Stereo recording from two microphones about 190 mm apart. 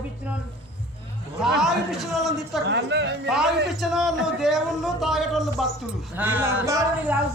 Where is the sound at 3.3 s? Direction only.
Centre (ahead or behind).